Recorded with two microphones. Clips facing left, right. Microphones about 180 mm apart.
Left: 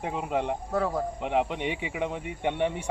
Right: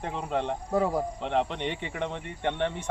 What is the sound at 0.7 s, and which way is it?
Speech, 20° right (ahead or behind).